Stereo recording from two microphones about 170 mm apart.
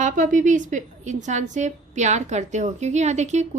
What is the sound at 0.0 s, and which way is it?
A woman's voice, 50° right (ahead or behind).